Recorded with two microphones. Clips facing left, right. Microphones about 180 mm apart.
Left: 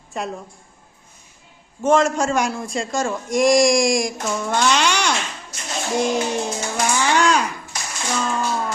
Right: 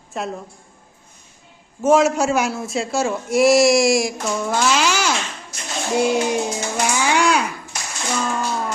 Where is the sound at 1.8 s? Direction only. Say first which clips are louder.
Right 2 dB; 5° right (ahead or behind).